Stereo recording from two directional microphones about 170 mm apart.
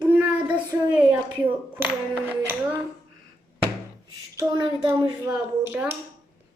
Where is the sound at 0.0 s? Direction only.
10° right (ahead or behind).